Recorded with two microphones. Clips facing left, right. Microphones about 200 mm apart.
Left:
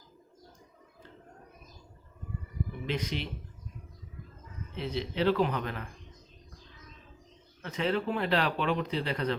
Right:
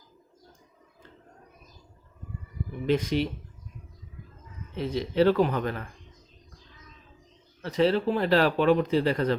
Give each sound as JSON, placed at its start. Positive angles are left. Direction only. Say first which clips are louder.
{"t": 2.8, "sound": "speech", "louder": "right 10 dB", "side_deg": -45}
{"t": 4.8, "sound": "speech", "louder": "right 7 dB", "side_deg": -45}
{"t": 7.6, "sound": "speech", "louder": "right 7 dB", "side_deg": -35}